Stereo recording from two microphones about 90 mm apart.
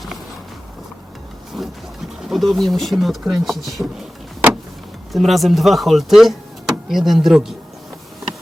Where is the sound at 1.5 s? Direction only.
Centre (ahead or behind).